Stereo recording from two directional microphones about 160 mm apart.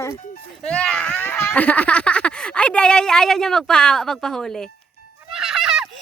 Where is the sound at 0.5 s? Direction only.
5° left (ahead or behind).